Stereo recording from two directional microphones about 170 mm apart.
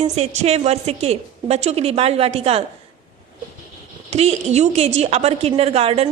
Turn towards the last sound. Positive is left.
turn(degrees=-35)  # may be behind; listen again after turning